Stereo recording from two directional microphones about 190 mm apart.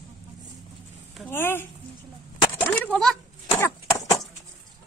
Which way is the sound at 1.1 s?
10° left (ahead or behind).